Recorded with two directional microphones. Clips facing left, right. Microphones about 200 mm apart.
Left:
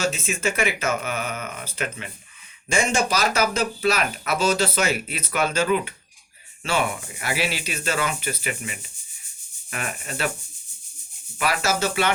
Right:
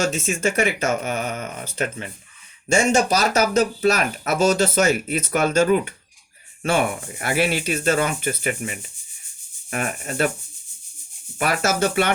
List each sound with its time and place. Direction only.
0.0 s speech: 45° right (ahead or behind)
11.3 s speech: 50° right (ahead or behind)